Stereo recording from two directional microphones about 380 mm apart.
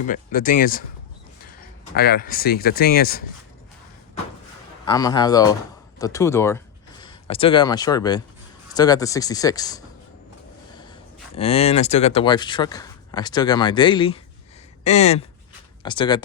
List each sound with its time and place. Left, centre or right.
0.1 s speech: left
2.0 s speech: left
4.9 s speech: centre
11.3 s speech: centre